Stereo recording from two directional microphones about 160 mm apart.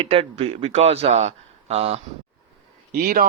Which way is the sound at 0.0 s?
35° right (ahead or behind).